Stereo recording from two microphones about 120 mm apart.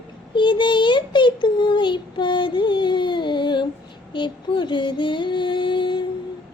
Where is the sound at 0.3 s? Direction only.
40° left (ahead or behind).